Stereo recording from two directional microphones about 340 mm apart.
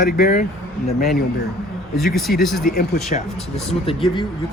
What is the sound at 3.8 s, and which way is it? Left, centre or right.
Speech, centre.